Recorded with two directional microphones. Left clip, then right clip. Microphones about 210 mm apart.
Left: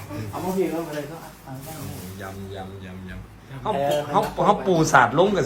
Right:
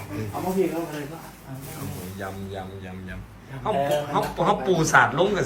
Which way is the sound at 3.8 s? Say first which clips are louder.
Left 2 dB; centre (ahead or behind).